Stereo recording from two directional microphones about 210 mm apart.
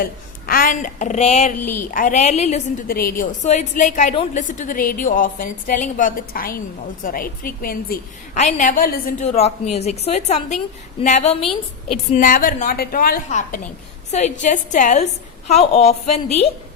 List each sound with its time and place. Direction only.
0.0 s a woman's voice: 45° left (ahead or behind)
4.1 s a woman's voice: 25° left (ahead or behind)
4.4 s a woman's voice: 40° left (ahead or behind)